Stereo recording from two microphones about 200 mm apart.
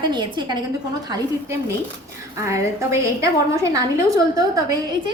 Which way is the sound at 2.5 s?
15° right (ahead or behind).